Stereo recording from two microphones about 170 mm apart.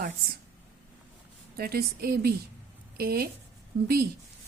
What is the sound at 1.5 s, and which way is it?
A woman's voice, 65° right (ahead or behind).